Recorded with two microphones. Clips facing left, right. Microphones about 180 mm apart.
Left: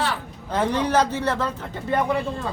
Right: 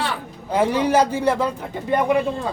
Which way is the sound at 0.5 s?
10° right (ahead or behind).